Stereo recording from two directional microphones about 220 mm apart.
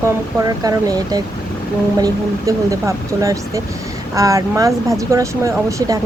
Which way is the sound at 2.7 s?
15° right (ahead or behind).